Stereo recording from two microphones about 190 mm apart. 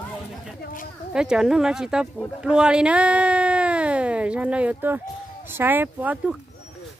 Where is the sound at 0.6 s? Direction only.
45° left (ahead or behind).